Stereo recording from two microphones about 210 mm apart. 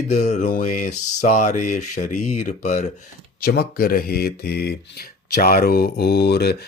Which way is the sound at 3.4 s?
45° left (ahead or behind).